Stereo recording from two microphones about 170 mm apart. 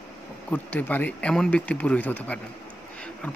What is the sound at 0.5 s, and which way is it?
Speech, 10° left (ahead or behind).